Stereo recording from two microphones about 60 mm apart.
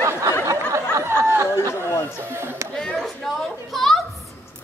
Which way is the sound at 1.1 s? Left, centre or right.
Right.